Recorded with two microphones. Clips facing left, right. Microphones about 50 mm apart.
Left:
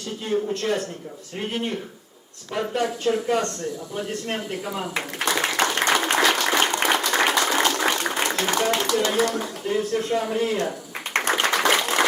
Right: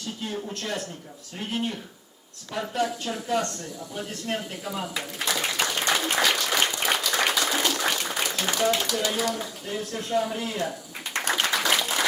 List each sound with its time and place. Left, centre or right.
0.5 s speech: left
4.9 s applause: left
8.2 s speech: left
9.6 s speech: left
11.4 s applause: left